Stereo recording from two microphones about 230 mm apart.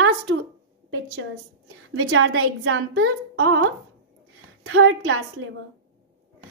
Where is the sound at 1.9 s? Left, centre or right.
Right.